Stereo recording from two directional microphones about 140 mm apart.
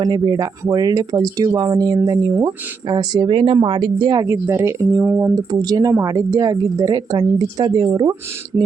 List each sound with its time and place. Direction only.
0.0 s speech: 25° right (ahead or behind)
4.3 s speech: 20° right (ahead or behind)
5.3 s speech: 30° right (ahead or behind)
8.5 s speech: 20° right (ahead or behind)